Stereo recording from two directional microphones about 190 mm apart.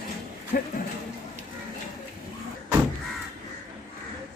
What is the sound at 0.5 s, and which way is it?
Speech, 45° left (ahead or behind).